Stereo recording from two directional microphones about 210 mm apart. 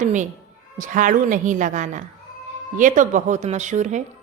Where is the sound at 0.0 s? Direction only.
35° right (ahead or behind).